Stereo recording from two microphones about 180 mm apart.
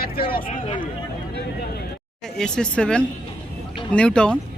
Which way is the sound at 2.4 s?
5° left (ahead or behind).